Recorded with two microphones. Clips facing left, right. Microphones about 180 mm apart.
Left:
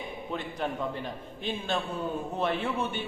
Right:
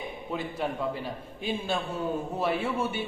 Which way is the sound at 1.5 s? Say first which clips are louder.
Right 1 dB; 10° right (ahead or behind).